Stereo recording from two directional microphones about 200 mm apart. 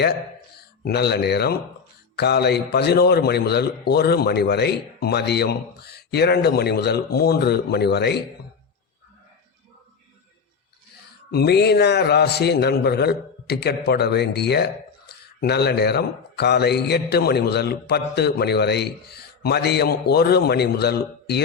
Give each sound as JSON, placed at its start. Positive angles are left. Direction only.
{"t": 0.9, "sound": "a man's voice", "side_deg": 55}
{"t": 11.3, "sound": "a man's voice", "side_deg": 55}